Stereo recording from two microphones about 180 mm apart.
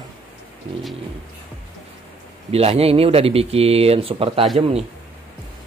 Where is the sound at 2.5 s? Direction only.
35° right (ahead or behind).